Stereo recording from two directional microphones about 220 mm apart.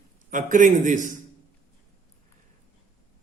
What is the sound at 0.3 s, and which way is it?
Speech, 35° right (ahead or behind).